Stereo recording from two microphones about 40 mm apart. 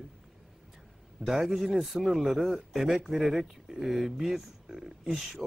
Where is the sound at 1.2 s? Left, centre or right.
Centre.